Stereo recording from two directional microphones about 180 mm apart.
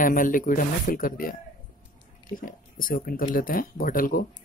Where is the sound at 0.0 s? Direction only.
50° left (ahead or behind).